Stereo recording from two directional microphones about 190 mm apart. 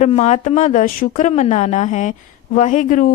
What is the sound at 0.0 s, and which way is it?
Speech, 35° left (ahead or behind).